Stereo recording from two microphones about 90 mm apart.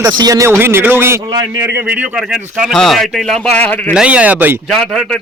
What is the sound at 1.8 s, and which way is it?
Speech, 15° right (ahead or behind).